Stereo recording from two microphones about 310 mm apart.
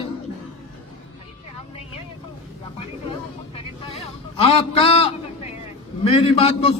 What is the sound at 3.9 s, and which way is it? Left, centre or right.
A man's voice, centre.